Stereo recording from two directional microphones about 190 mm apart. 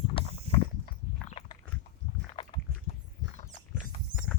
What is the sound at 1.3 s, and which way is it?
Biting, 30° left (ahead or behind).